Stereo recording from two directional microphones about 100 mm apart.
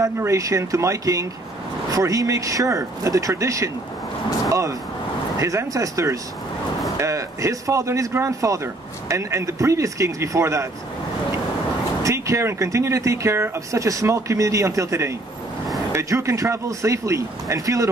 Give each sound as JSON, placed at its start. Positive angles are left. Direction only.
{"t": 0.0, "sound": "speech", "side_deg": -30}
{"t": 4.5, "sound": "vehicle", "side_deg": -35}
{"t": 5.4, "sound": "speech", "side_deg": -30}
{"t": 12.0, "sound": "speech", "side_deg": -30}